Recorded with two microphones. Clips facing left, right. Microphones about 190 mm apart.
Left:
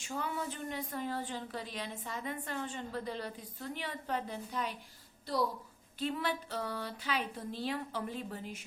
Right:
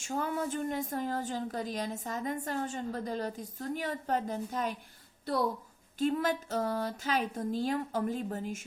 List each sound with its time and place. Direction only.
0.0 s a woman's voice: 45° right (ahead or behind)
6.0 s a woman's voice: 45° right (ahead or behind)